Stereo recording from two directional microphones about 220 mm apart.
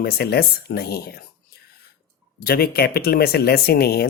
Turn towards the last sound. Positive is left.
turn(degrees=45)  # may be behind; listen again after turning